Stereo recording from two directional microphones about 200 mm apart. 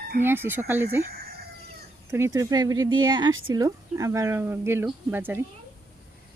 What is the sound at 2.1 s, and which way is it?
Speech, 15° right (ahead or behind).